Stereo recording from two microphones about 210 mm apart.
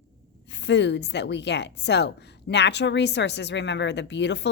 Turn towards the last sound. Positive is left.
turn(degrees=55)  # may be behind; listen again after turning